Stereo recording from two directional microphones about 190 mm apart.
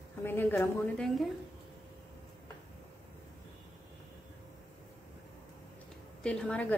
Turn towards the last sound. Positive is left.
turn(degrees=5)  # may be behind; listen again after turning